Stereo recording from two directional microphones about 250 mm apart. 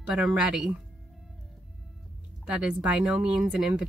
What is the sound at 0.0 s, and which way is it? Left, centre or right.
Speech, centre.